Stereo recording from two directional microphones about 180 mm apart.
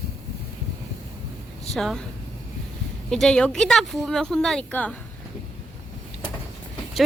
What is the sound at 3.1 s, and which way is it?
Speech, 5° left (ahead or behind).